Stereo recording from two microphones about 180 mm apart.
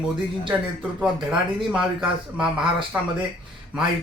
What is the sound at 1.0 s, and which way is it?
Speech, 5° right (ahead or behind).